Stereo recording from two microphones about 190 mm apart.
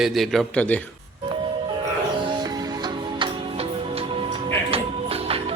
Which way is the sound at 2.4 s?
20° right (ahead or behind).